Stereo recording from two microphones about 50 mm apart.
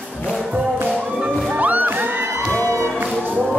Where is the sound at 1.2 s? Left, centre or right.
Right.